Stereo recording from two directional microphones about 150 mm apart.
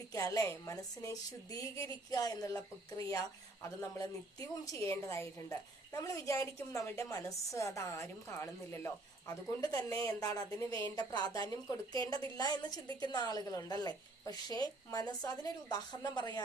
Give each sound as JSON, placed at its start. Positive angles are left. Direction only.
{"t": 0.1, "sound": "a woman's voice", "side_deg": 20}